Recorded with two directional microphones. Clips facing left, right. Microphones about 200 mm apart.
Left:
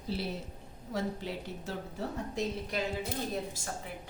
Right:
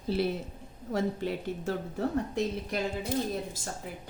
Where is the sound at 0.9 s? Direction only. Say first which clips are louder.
Right 5 dB; 50° right (ahead or behind).